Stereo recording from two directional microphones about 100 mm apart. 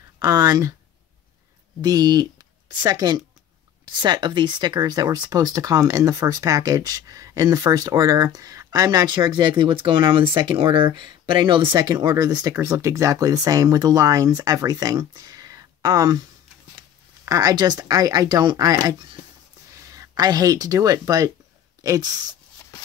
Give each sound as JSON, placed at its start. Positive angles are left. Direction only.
{"t": 0.2, "sound": "speech", "side_deg": -40}
{"t": 1.8, "sound": "speech", "side_deg": -40}
{"t": 11.9, "sound": "speech", "side_deg": -40}
{"t": 12.5, "sound": "speech", "side_deg": -30}
{"t": 17.2, "sound": "speech", "side_deg": -35}